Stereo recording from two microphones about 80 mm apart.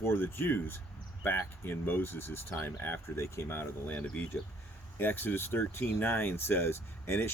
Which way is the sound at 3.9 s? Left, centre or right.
Centre.